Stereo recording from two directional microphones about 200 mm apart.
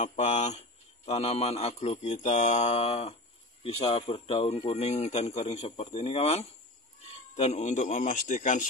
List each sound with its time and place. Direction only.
0.0 s speech: 35° left (ahead or behind)